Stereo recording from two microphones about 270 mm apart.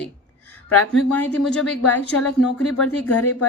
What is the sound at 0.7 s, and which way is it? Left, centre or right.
Speech, left.